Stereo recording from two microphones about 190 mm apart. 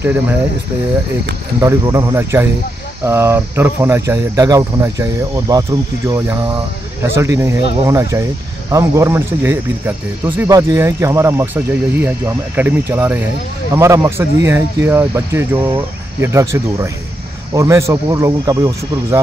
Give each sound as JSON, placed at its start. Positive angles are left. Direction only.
{"t": 0.0, "sound": "speech", "side_deg": -10}
{"t": 1.6, "sound": "speech", "side_deg": -15}